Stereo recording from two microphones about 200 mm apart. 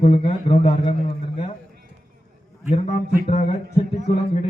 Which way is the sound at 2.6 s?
35° left (ahead or behind).